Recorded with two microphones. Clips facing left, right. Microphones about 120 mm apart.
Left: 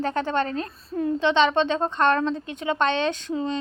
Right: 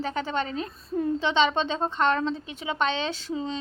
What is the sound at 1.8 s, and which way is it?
A woman's voice, 10° right (ahead or behind).